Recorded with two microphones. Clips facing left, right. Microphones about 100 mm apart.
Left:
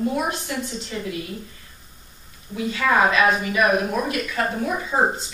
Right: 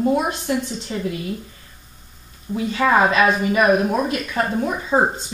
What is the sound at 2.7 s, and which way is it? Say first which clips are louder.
Speech: right 2 dB; 35° right (ahead or behind).